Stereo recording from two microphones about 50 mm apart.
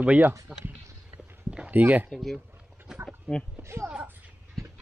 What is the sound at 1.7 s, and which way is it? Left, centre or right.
Speech, right.